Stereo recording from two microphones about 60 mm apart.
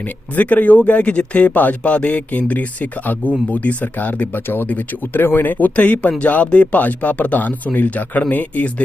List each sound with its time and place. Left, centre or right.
0.3 s speech: left